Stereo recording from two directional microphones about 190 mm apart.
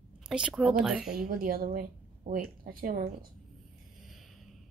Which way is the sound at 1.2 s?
50° right (ahead or behind).